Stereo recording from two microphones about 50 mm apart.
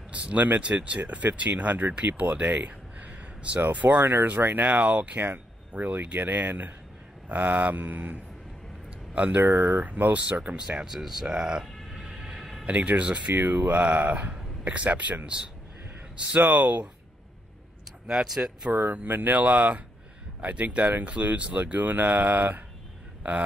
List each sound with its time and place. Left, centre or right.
0.1 s speech: right
4.6 s speech: right
9.1 s speech: right
9.4 s speech: right
10.4 s speech: centre
12.0 s train: right
12.6 s speech: right
13.3 s speech: right
18.0 s speech: centre
18.7 s speech: right